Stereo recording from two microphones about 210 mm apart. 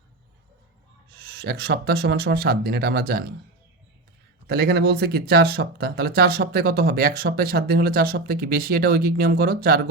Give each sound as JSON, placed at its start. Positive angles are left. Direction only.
{"t": 1.2, "sound": "speech", "side_deg": -50}
{"t": 4.4, "sound": "speech", "side_deg": -50}